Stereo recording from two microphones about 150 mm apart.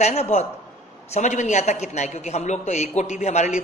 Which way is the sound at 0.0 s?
45° left (ahead or behind).